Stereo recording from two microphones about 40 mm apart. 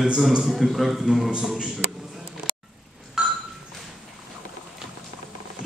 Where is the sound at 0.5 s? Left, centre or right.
Centre.